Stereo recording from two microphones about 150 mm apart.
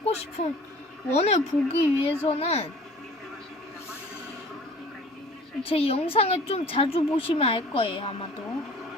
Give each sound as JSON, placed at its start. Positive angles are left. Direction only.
{"t": 0.0, "sound": "a woman's voice", "side_deg": 45}
{"t": 5.6, "sound": "a woman's voice", "side_deg": 40}